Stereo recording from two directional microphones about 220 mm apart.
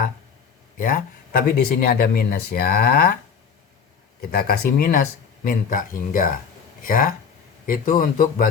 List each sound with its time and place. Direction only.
0.8 s speech: 40° left (ahead or behind)
4.3 s speech: 45° left (ahead or behind)